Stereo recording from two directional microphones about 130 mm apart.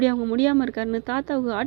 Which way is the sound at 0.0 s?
25° right (ahead or behind).